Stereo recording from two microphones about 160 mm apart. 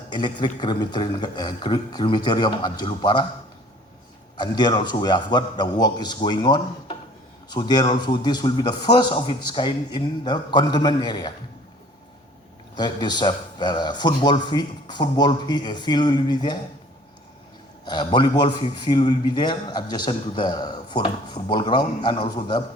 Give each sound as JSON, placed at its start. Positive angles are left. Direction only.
{"t": 0.1, "sound": "a man's voice", "side_deg": 30}
{"t": 4.4, "sound": "a man's voice", "side_deg": 25}
{"t": 12.7, "sound": "a man's voice", "side_deg": 25}
{"t": 17.8, "sound": "a man's voice", "side_deg": 30}